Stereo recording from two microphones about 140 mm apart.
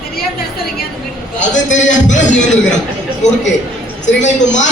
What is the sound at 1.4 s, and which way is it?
Speech, 60° left (ahead or behind).